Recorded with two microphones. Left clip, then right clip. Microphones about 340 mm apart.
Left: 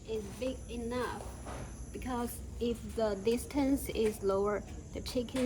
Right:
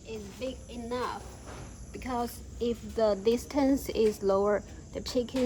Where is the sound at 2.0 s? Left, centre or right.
Right.